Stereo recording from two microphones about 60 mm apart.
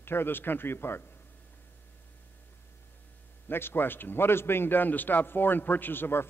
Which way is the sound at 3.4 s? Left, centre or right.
Left.